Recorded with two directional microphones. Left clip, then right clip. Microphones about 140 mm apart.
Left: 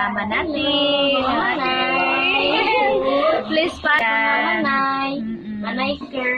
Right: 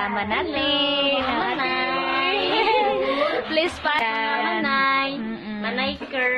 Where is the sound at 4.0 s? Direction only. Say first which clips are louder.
Left 5 dB; 30° right (ahead or behind).